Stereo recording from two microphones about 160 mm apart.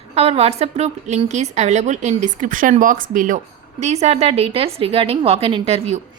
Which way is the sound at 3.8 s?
45° right (ahead or behind).